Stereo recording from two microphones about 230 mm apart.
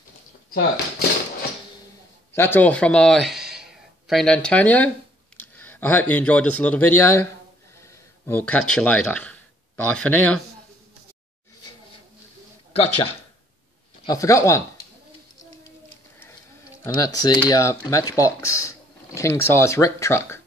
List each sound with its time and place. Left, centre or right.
0.5 s speech: left
2.3 s a man's voice: centre
14.0 s speech: centre
16.8 s speech: centre